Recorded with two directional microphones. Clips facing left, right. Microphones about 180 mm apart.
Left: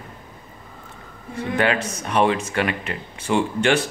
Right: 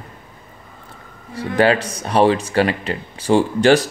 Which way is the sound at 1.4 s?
35° right (ahead or behind).